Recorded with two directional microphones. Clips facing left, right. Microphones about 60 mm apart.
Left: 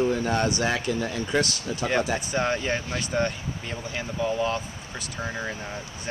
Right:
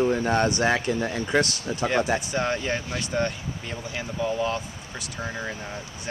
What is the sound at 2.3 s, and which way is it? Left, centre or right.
Speech, centre.